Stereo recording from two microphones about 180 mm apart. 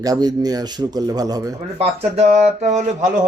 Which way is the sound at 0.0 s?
20° right (ahead or behind).